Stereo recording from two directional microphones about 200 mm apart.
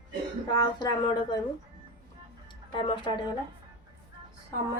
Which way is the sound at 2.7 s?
25° left (ahead or behind).